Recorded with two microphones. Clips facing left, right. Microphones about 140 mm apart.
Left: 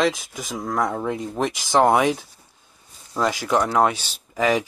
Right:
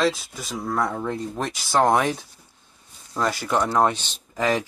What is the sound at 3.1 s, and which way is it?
Speech, 10° left (ahead or behind).